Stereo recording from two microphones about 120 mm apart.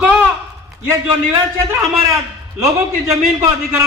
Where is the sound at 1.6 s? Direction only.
20° right (ahead or behind).